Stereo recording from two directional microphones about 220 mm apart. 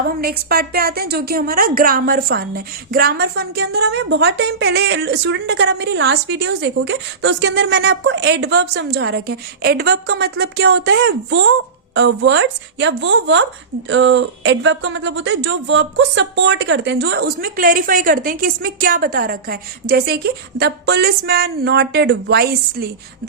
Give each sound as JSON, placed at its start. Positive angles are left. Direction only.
{"t": 0.2, "sound": "a woman's voice", "side_deg": -45}